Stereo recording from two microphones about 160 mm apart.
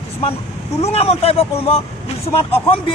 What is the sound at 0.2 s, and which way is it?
A man's voice, 40° left (ahead or behind).